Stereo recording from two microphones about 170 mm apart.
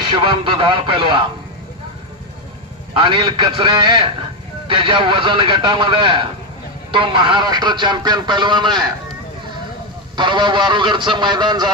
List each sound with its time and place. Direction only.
0.1 s a man's voice: 30° right (ahead or behind)
2.9 s a man's voice: 30° right (ahead or behind)
10.1 s speech: 25° right (ahead or behind)